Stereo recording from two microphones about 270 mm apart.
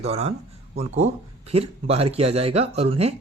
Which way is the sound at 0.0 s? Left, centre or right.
Right.